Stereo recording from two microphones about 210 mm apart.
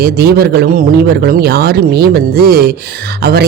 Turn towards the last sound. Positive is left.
turn(degrees=-50)  # may be behind; listen again after turning